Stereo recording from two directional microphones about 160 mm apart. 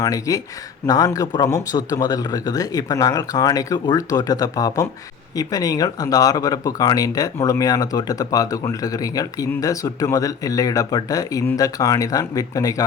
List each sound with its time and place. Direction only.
0.0 s speech: 20° left (ahead or behind)